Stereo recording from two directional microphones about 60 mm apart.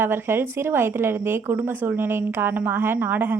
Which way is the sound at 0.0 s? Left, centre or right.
Right.